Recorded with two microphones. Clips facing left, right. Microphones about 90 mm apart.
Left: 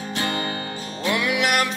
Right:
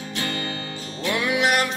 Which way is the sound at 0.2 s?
25° left (ahead or behind).